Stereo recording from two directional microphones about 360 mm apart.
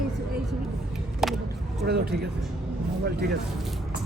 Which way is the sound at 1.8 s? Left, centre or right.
Right.